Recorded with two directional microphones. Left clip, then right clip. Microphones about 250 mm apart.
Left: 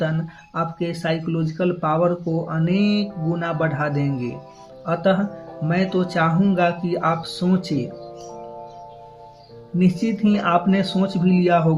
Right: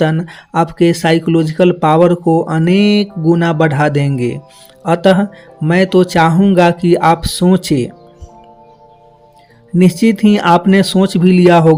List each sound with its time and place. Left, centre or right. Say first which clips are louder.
0.0 s speech: right 10 dB; right
9.7 s speech: right 11 dB; right